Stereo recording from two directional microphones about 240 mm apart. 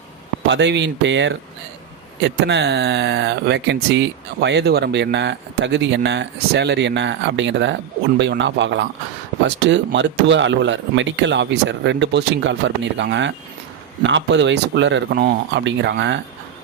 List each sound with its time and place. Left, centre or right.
0.4 s speech: right